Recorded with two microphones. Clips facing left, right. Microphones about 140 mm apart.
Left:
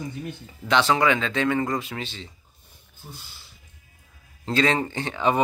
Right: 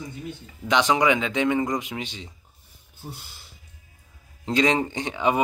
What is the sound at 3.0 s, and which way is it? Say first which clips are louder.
Speech: right 5 dB; 40° right (ahead or behind).